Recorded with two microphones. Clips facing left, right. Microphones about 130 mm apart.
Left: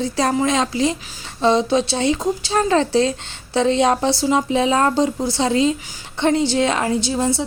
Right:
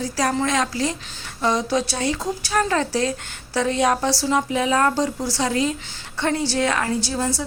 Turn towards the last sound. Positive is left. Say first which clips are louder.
# left 4 dB
turn(degrees=20)  # may be behind; listen again after turning